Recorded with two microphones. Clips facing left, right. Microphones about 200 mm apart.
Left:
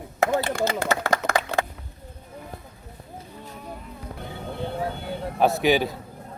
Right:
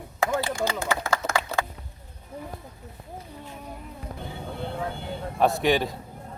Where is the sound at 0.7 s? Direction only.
60° left (ahead or behind).